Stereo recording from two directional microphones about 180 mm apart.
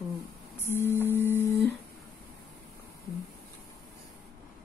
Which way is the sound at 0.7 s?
15° left (ahead or behind).